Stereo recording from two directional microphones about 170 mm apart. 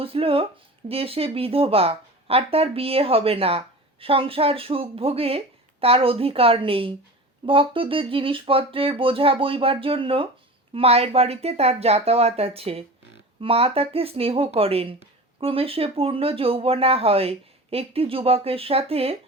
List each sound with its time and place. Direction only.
0.0 s speech: 35° right (ahead or behind)